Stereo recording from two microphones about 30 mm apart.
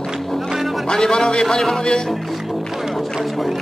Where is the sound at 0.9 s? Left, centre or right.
Left.